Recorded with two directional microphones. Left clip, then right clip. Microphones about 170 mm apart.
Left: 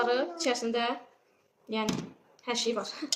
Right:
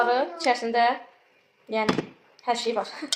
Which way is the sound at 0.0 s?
45° left (ahead or behind).